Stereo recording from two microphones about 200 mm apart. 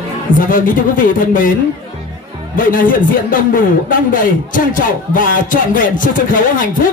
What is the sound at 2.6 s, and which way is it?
A man's voice, 45° left (ahead or behind).